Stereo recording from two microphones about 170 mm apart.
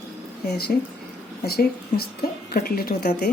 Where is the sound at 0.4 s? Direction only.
65° left (ahead or behind).